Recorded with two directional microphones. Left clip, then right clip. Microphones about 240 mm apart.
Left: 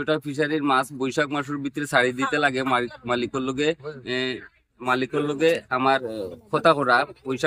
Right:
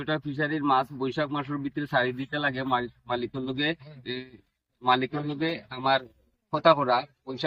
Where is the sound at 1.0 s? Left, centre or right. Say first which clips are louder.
Left 5 dB; left.